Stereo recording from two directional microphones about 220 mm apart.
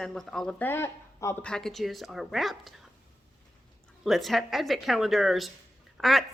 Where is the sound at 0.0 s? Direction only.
Centre (ahead or behind).